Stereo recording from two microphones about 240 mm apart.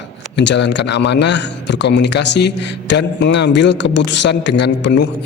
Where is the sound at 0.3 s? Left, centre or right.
Left.